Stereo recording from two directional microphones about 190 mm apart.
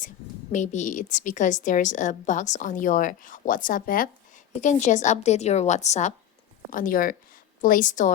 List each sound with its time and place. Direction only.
0.5 s a woman's voice: 40° left (ahead or behind)